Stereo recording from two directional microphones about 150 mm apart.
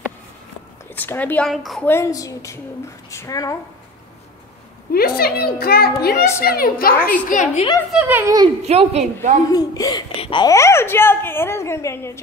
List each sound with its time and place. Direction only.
0.9 s a woman's voice: 10° left (ahead or behind)
1.5 s a woman's voice: centre (ahead or behind)
1.9 s a woman's voice: 20° left (ahead or behind)
4.9 s a woman's voice: 90° left; by 7.2 s 75° left (ahead or behind)
7.2 s a woman's voice: 60° left (ahead or behind)
7.9 s speech: 10° right (ahead or behind)
8.6 s a woman's voice: 45° right (ahead or behind)
9.5 s a woman's voice: 25° left (ahead or behind)
10.5 s a woman's voice: 20° left (ahead or behind)